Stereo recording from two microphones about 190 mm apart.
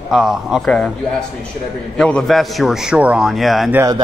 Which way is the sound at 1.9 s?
5° left (ahead or behind).